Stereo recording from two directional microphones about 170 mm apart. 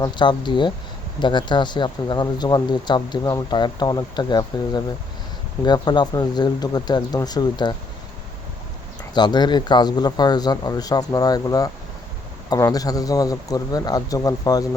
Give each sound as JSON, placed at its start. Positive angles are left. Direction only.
{"t": 0.0, "sound": "speech", "side_deg": 25}
{"t": 9.1, "sound": "speech", "side_deg": 25}